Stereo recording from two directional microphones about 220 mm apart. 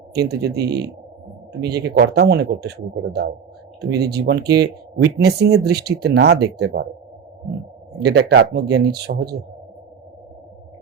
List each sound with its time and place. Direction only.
0.2 s speech: 50° right (ahead or behind)
7.9 s speech: 50° right (ahead or behind)